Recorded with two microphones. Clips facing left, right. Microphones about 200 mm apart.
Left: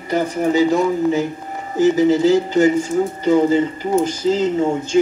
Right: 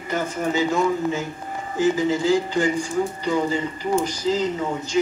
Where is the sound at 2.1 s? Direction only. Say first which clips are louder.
Left 6 dB; 40° left (ahead or behind).